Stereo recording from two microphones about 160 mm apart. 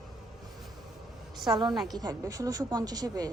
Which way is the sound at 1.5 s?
25° right (ahead or behind).